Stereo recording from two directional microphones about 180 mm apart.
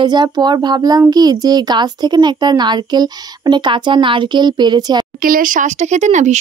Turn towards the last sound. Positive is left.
turn(degrees=-40)  # may be behind; listen again after turning